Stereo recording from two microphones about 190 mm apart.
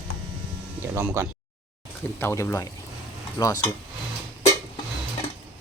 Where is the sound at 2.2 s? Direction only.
15° left (ahead or behind).